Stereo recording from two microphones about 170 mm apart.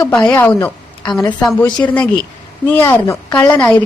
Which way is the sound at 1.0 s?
25° left (ahead or behind).